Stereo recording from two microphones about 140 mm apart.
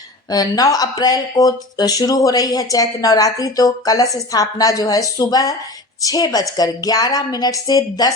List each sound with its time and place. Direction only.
0.3 s speech: 25° left (ahead or behind)